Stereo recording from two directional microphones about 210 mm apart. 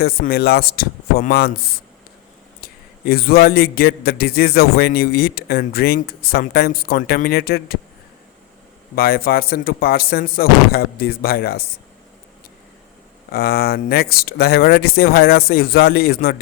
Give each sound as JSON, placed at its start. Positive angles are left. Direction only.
{"t": 0.0, "sound": "a man's voice", "side_deg": 45}
{"t": 9.0, "sound": "a man's voice", "side_deg": 45}
{"t": 13.3, "sound": "a man's voice", "side_deg": 45}